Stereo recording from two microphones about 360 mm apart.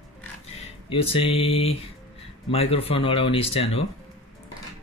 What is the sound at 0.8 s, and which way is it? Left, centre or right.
Speech, centre.